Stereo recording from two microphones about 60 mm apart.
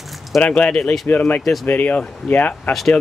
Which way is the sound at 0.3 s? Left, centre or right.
Centre.